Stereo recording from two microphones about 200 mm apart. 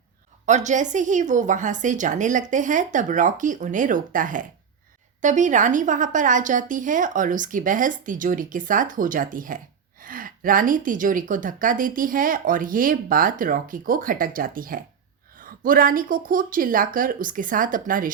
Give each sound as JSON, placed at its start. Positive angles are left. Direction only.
{"t": 0.4, "sound": "a woman's voice", "side_deg": -35}